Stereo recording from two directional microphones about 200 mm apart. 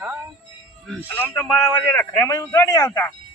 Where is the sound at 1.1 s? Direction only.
10° left (ahead or behind).